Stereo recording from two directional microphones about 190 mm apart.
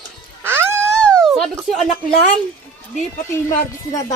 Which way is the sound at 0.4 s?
10° right (ahead or behind).